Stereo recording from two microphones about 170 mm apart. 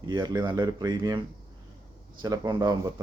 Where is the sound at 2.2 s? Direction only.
25° right (ahead or behind).